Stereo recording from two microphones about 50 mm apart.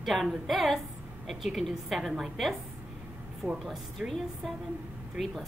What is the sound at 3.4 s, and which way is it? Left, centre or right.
Speech, right.